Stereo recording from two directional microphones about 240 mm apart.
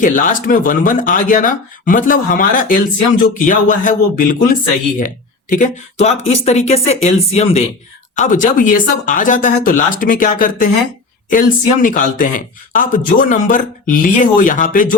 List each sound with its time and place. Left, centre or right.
0.0 s speech: left